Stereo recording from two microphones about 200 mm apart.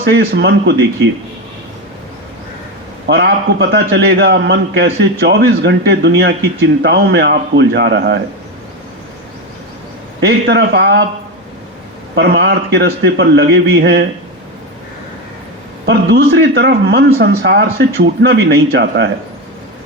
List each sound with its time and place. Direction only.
0.1 s a man's voice: 60° right (ahead or behind)
3.1 s a man's voice: 55° right (ahead or behind)
10.2 s a man's voice: 60° right (ahead or behind)
12.1 s a man's voice: 60° right (ahead or behind)
15.9 s a man's voice: 55° right (ahead or behind)